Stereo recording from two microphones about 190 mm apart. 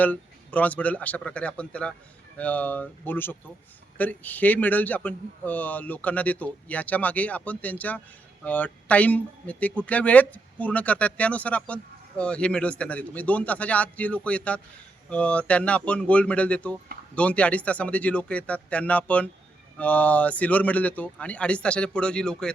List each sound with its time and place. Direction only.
0.0 s speech: 10° left (ahead or behind)